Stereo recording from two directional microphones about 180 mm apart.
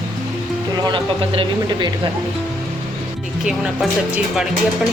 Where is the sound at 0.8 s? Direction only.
25° right (ahead or behind).